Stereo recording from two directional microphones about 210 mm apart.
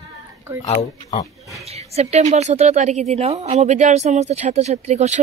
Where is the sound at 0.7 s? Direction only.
35° left (ahead or behind).